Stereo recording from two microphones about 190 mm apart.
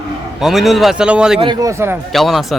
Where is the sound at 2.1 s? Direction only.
Centre (ahead or behind).